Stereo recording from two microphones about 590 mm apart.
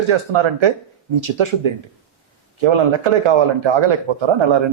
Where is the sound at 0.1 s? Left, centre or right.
Right.